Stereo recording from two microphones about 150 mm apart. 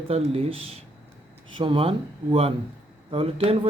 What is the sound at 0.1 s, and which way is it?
Speech, 40° right (ahead or behind).